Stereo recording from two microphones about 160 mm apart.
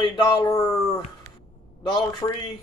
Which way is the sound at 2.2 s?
25° left (ahead or behind).